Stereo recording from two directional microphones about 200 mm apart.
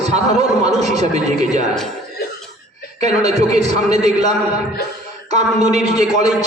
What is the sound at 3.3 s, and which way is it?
A man's voice, 35° right (ahead or behind).